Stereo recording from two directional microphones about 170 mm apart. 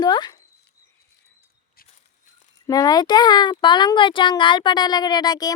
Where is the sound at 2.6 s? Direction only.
20° left (ahead or behind).